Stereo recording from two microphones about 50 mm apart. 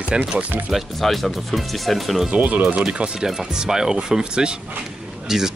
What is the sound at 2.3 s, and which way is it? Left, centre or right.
Speech, right.